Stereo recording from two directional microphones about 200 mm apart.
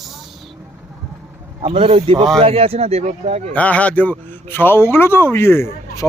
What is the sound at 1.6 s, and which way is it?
A man's voice, 30° right (ahead or behind).